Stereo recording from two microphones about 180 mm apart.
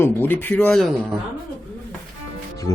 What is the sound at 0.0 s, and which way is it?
Speech, 10° left (ahead or behind).